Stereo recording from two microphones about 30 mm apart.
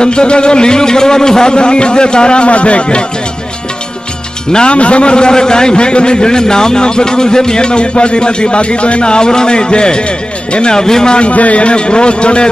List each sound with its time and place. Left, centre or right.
0.0 s a man's voice: left
4.6 s a man's voice: left
10.7 s speech: left
11.1 s a man's voice: left